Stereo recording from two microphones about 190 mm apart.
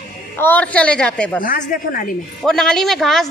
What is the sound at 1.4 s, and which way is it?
Speech, 45° left (ahead or behind).